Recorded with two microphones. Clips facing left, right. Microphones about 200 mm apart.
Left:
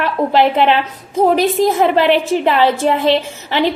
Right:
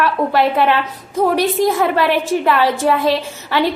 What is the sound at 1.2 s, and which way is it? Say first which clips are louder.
A woman's voice: left 2 dB; 25° left (ahead or behind).